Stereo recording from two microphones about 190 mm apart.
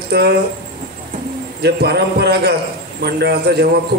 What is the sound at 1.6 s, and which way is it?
A man's voice, 60° right (ahead or behind).